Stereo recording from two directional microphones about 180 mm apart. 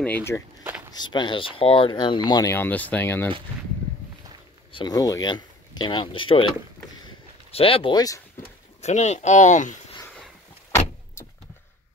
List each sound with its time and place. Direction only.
0.0 s speech: 10° left (ahead or behind)
0.9 s speech: 25° left (ahead or behind)
4.7 s speech: 20° left (ahead or behind)
7.5 s speech: 30° left (ahead or behind)
8.8 s speech: 40° left (ahead or behind)